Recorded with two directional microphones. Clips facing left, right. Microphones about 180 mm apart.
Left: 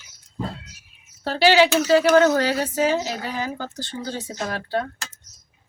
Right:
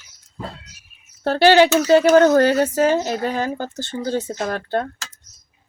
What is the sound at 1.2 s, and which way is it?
Speech, 55° right (ahead or behind).